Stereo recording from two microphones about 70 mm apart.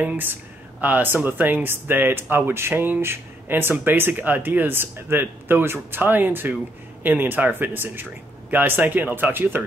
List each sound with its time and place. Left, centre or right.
0.0 s speech: right